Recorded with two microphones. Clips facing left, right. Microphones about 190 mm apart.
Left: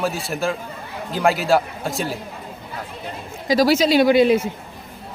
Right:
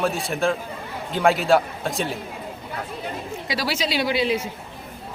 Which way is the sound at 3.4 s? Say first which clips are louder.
Left 11 dB; 45° left (ahead or behind).